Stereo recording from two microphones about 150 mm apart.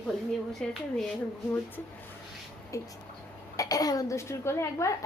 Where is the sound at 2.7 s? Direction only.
20° left (ahead or behind).